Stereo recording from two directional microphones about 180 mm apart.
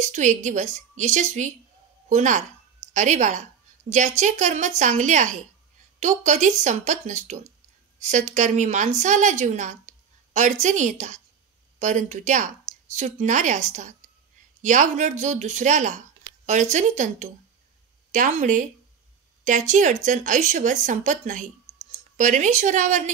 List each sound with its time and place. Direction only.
0.0 s a woman's voice: 40° right (ahead or behind)